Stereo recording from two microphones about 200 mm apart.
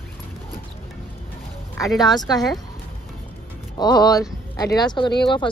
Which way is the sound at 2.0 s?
20° left (ahead or behind).